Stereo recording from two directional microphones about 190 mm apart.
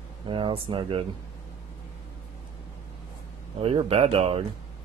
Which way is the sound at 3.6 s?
30° right (ahead or behind).